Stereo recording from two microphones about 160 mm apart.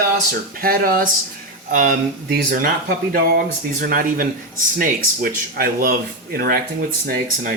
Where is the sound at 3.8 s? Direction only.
60° right (ahead or behind).